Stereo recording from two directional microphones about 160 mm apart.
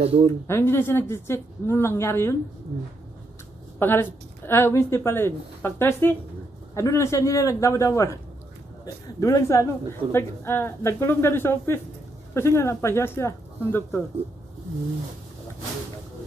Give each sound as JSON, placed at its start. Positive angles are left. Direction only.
{"t": 0.0, "sound": "speech", "side_deg": -35}
{"t": 0.5, "sound": "a woman's voice", "side_deg": 15}
{"t": 3.8, "sound": "a woman's voice", "side_deg": 15}